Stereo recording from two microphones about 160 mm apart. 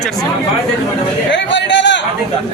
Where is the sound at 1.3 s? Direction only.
90° left.